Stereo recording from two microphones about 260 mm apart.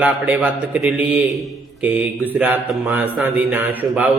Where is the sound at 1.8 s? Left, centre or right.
Centre.